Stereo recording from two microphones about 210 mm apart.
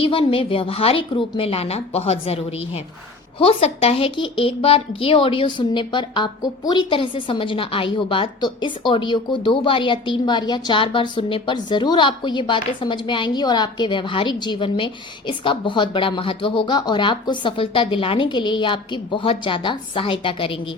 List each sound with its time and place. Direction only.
0.0 s a woman's voice: 25° left (ahead or behind)